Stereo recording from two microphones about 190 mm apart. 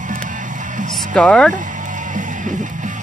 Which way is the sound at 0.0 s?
45° right (ahead or behind).